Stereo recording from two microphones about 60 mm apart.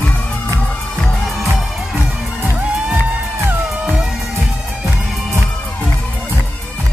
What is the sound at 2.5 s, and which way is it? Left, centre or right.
Music, right.